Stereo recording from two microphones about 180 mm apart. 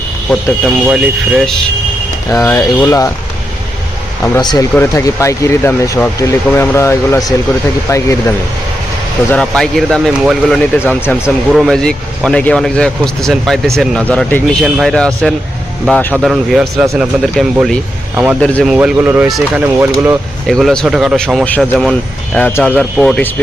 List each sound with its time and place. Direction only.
0.6 s speech: 5° right (ahead or behind)
2.3 s speech: 10° left (ahead or behind)
4.4 s speech: 25° left (ahead or behind)
9.3 s speech: 5° left (ahead or behind)
10.8 s speech: 5° left (ahead or behind); by 20.1 s 10° right (ahead or behind)
20.5 s speech: centre (ahead or behind)